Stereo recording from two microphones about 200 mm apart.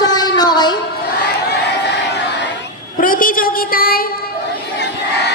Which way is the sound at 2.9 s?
45° left (ahead or behind).